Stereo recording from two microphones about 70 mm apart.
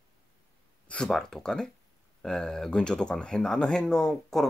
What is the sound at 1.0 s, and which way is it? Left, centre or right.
Speech, centre.